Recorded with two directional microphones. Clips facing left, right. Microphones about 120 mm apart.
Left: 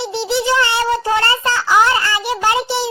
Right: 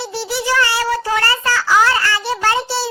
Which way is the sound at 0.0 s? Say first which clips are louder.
Left 4 dB; 20° left (ahead or behind).